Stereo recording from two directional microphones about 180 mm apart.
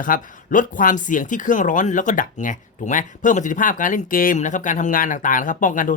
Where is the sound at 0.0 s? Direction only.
45° left (ahead or behind).